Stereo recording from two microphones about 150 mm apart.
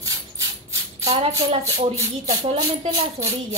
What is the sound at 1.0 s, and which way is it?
Child singing, 40° right (ahead or behind).